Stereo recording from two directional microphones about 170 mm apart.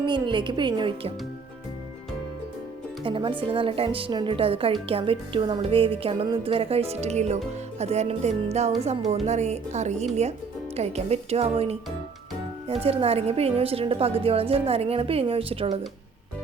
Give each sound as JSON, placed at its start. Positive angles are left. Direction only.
{"t": 0.0, "sound": "a woman's voice", "side_deg": -25}
{"t": 3.0, "sound": "speech", "side_deg": -30}